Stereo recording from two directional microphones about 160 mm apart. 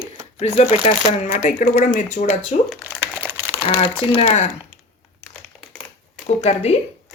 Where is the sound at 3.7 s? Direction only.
40° left (ahead or behind).